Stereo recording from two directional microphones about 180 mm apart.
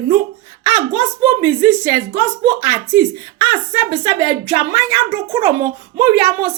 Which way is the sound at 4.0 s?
25° right (ahead or behind).